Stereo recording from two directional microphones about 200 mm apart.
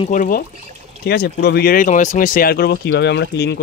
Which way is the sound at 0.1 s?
40° left (ahead or behind).